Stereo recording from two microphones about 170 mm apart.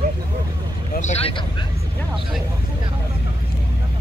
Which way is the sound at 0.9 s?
45° left (ahead or behind).